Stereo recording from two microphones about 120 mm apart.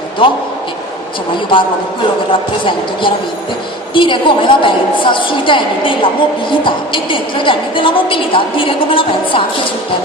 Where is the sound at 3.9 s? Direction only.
45° left (ahead or behind).